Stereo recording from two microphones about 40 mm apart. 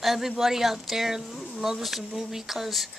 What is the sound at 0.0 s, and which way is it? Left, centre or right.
Speech, centre.